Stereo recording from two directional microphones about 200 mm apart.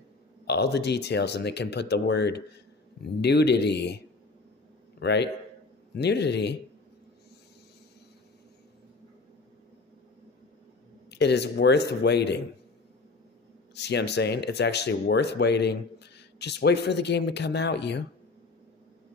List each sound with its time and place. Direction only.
0.5 s speech: 55° left (ahead or behind)
5.0 s speech: 55° left (ahead or behind)
11.1 s speech: 55° left (ahead or behind)
13.7 s speech: 55° left (ahead or behind)